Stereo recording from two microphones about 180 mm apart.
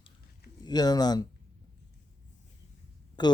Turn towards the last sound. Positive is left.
turn(degrees=25)  # may be behind; listen again after turning